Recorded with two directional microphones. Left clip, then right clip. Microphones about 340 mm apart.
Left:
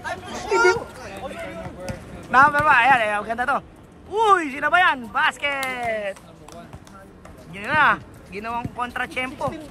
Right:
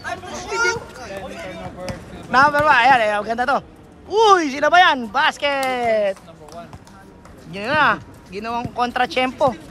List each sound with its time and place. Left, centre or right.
0.0 s a sound: centre
4.1 s speech: centre
7.5 s speech: centre